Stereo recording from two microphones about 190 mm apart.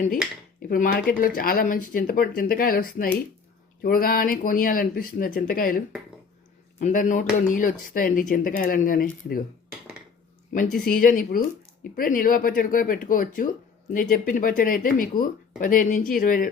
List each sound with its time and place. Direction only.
0.7 s speech: 50° left (ahead or behind)
10.8 s speech: 50° left (ahead or behind)